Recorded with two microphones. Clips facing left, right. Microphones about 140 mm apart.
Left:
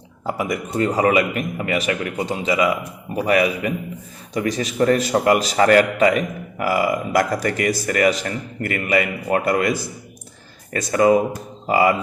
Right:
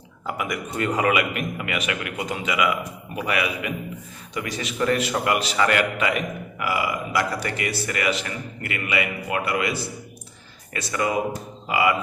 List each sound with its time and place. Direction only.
0.3 s a man's voice: 35° left (ahead or behind)